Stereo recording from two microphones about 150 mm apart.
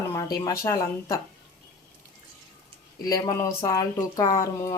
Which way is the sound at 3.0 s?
25° left (ahead or behind).